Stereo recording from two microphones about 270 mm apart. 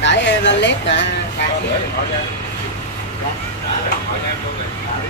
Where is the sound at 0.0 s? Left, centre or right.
Left.